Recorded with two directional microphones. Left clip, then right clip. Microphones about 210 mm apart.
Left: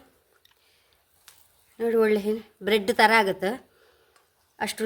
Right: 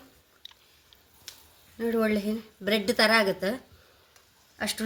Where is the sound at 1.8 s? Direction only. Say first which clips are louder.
Left 5 dB; 50° left (ahead or behind).